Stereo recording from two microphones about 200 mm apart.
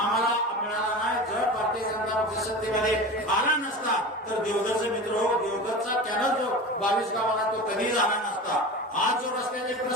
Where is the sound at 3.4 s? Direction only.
40° left (ahead or behind).